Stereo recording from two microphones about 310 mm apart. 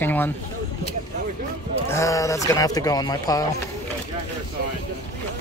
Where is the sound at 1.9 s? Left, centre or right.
Centre.